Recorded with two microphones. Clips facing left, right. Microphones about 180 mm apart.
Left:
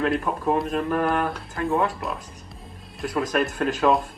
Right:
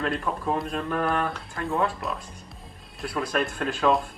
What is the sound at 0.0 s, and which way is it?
Speech, 50° left (ahead or behind).